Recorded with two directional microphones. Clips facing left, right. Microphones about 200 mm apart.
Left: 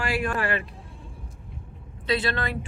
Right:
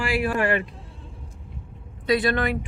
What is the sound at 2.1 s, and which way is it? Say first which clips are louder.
Speech: right 5 dB; 15° right (ahead or behind).